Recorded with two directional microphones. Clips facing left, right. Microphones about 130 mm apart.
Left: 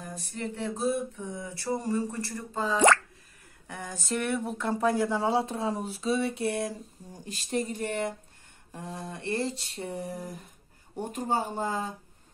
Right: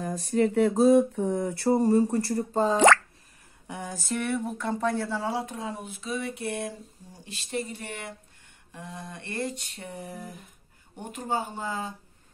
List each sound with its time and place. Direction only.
0.3 s a sound: 85° right
1.6 s speech: 40° right (ahead or behind)
3.8 s speech: 5° right (ahead or behind); by 9.7 s 25° left (ahead or behind)
9.8 s speech: 40° left (ahead or behind)